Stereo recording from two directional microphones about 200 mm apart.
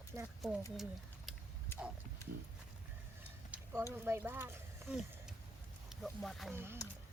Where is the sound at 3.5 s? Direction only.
5° right (ahead or behind).